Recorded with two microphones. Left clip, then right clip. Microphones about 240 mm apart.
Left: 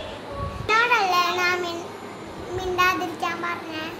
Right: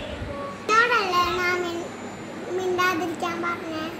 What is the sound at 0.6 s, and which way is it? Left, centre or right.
Child singing, centre.